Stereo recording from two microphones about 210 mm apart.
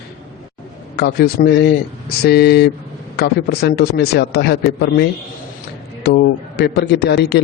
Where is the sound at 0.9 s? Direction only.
50° left (ahead or behind).